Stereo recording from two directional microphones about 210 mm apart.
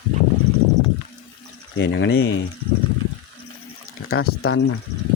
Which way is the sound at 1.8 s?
60° left (ahead or behind).